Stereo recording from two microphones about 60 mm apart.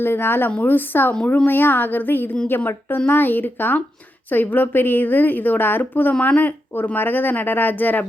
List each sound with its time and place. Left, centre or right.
0.0 s a woman's voice: left